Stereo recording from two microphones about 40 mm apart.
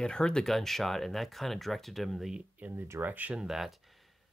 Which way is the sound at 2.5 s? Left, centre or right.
Right.